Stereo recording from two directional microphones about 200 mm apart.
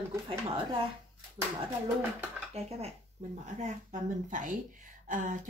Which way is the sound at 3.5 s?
40° right (ahead or behind).